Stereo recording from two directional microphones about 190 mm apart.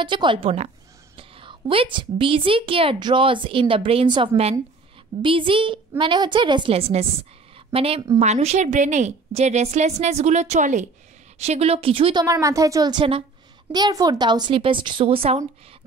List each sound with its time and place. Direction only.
0.0 s a woman's voice: 25° right (ahead or behind)